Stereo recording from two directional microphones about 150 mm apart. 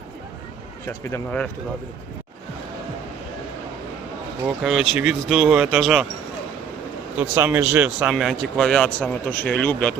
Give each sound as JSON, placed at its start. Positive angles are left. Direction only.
{"t": 0.9, "sound": "speech", "side_deg": 15}
{"t": 4.4, "sound": "speech", "side_deg": 0}
{"t": 7.2, "sound": "speech", "side_deg": -10}